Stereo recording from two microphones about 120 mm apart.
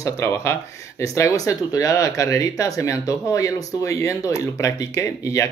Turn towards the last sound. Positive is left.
turn(degrees=25)  # may be behind; listen again after turning